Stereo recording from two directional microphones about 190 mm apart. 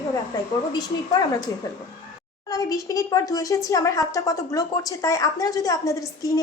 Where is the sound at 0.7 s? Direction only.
20° left (ahead or behind).